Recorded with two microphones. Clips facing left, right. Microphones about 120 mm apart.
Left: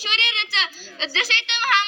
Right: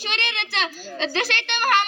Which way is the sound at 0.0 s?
55° right (ahead or behind).